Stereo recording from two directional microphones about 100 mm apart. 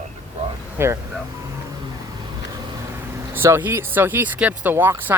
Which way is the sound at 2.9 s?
25° right (ahead or behind).